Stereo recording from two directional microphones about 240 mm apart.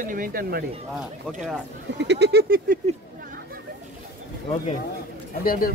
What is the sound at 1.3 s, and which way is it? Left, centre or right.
Speech, centre.